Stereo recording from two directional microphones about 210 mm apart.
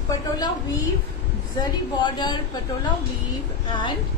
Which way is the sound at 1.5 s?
20° left (ahead or behind).